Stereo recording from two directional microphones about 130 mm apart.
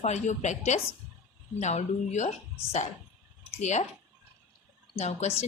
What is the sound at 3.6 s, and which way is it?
Speech, 60° left (ahead or behind).